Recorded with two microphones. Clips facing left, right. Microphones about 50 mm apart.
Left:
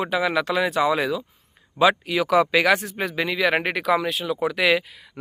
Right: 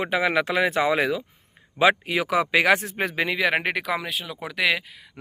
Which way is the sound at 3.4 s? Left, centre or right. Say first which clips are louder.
Left 5 dB; centre.